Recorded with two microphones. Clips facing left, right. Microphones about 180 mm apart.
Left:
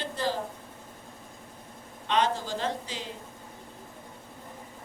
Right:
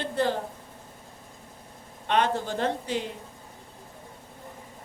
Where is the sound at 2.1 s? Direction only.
60° right (ahead or behind).